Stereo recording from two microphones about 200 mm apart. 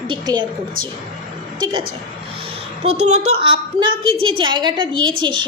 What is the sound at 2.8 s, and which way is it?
A woman's voice, 35° right (ahead or behind).